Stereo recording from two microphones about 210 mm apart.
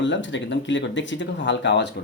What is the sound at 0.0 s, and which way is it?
Speech, 60° left (ahead or behind).